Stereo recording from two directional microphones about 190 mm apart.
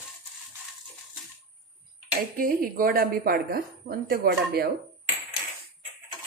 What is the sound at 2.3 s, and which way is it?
A woman's voice, 50° right (ahead or behind).